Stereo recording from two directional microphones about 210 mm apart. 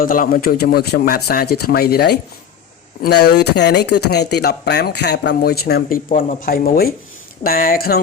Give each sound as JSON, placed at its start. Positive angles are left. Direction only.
{"t": 0.0, "sound": "speech", "side_deg": 40}